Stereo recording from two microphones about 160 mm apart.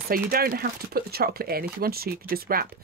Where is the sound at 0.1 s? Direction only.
65° right (ahead or behind).